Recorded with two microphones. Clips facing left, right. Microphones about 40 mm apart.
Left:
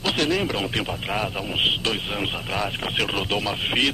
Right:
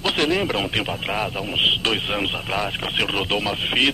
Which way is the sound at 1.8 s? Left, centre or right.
Right.